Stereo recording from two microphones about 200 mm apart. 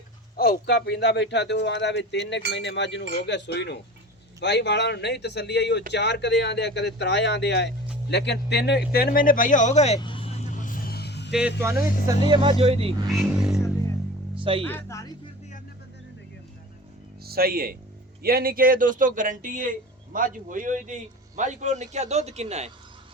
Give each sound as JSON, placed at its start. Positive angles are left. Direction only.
{"t": 0.3, "sound": "speech", "side_deg": 50}
{"t": 10.0, "sound": "vehicle", "side_deg": 25}
{"t": 11.3, "sound": "speech", "side_deg": -5}
{"t": 13.1, "sound": "speech", "side_deg": 0}
{"t": 14.3, "sound": "music", "side_deg": -25}
{"t": 14.6, "sound": "speech", "side_deg": 10}
{"t": 17.2, "sound": "speech", "side_deg": -50}